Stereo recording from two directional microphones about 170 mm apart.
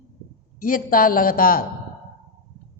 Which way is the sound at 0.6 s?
55° left (ahead or behind).